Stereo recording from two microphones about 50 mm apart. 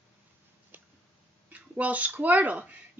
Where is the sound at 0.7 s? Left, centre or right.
Right.